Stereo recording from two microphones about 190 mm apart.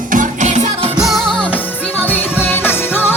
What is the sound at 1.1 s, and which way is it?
Music, 5° left (ahead or behind).